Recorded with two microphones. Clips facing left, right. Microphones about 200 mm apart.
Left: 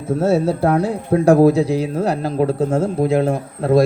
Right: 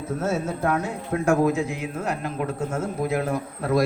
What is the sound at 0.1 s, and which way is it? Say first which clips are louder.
A man's voice: left 10 dB; 30° left (ahead or behind).